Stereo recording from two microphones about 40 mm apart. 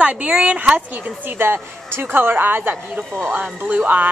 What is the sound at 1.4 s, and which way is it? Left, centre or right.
A woman's voice, right.